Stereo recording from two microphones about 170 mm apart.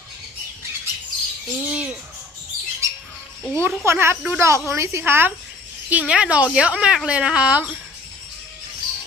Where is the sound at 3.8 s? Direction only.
15° right (ahead or behind).